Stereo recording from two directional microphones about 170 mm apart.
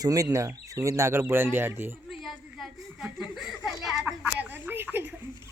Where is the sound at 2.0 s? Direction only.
Centre (ahead or behind).